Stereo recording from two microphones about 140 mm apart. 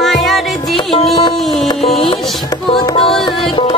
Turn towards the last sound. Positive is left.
turn(degrees=0)  # may be behind; listen again after turning